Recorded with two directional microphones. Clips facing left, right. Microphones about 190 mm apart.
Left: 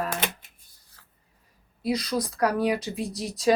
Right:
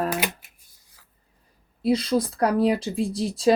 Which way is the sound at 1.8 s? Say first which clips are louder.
Right 5 dB; 30° right (ahead or behind).